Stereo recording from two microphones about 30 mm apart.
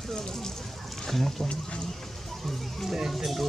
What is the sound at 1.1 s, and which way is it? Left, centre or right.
Speech, centre.